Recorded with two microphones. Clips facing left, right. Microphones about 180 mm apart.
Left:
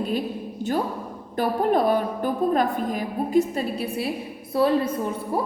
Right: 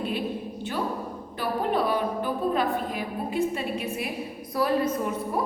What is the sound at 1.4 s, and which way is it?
A woman's voice, 45° left (ahead or behind).